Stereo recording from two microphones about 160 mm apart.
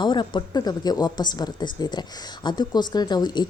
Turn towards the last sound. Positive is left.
turn(degrees=25)  # may be behind; listen again after turning